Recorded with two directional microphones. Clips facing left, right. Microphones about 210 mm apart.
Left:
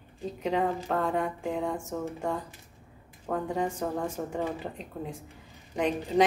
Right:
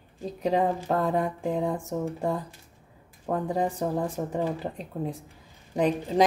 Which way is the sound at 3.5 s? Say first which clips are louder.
Right 4 dB; 35° right (ahead or behind).